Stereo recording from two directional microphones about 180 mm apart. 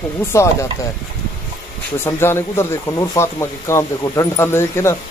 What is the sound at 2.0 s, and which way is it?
Speech, 15° left (ahead or behind).